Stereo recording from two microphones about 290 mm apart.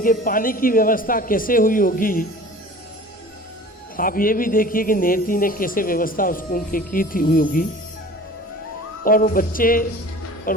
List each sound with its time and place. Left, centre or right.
0.0 s a man's voice: left
3.9 s a man's voice: left
9.0 s a man's voice: left